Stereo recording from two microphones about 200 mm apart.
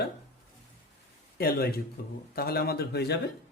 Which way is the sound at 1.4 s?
50° left (ahead or behind).